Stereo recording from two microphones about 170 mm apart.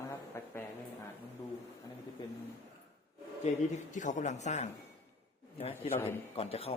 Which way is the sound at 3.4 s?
45° left (ahead or behind).